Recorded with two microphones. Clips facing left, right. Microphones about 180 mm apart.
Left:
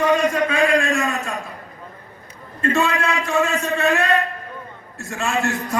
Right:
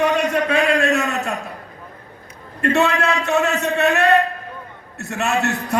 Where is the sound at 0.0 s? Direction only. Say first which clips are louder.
Even; 70° right (ahead or behind).